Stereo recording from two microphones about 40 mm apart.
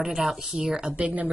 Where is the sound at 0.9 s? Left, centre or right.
Right.